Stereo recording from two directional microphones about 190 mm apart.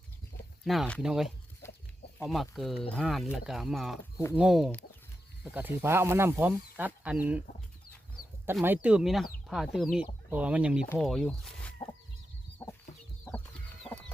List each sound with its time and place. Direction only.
0.6 s speech: centre (ahead or behind)
1.6 s chicken: 15° left (ahead or behind)
2.1 s speech: centre (ahead or behind)
8.6 s speech: 10° right (ahead or behind)